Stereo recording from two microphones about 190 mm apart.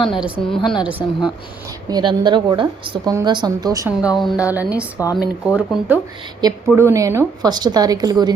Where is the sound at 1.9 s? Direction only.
25° right (ahead or behind).